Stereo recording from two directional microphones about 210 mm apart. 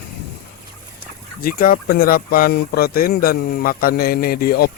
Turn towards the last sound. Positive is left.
turn(degrees=45)  # may be behind; listen again after turning